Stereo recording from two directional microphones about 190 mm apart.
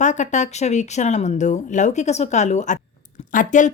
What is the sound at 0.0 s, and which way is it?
A woman's voice, 40° left (ahead or behind).